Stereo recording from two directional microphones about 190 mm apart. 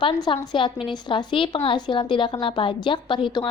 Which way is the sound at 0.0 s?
25° left (ahead or behind).